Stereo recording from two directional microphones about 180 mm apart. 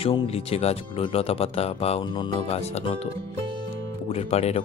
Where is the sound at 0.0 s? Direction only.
30° left (ahead or behind).